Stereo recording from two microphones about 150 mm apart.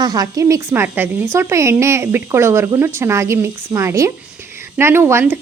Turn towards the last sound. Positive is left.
turn(degrees=-15)  # may be behind; listen again after turning